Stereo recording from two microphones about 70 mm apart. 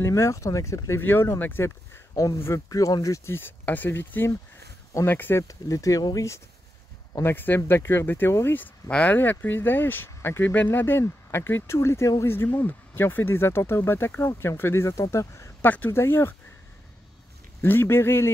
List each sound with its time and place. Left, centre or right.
0.0 s speech: left
1.0 s speech: left
3.3 s speech: left
5.5 s speech: left
7.2 s speech: left
8.9 s speech: left
10.5 s speech: left
12.3 s speech: left
15.6 s speech: left
17.6 s speech: left